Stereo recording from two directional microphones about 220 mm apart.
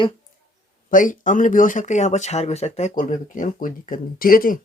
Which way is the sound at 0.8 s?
35° left (ahead or behind).